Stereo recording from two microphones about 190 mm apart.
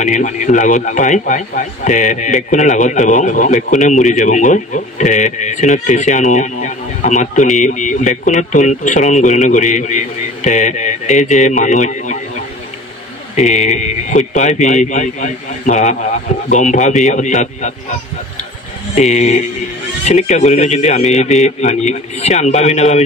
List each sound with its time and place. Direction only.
0.0 s speech: 40° left (ahead or behind)
13.4 s speech: 40° left (ahead or behind)
18.9 s speech: 35° left (ahead or behind)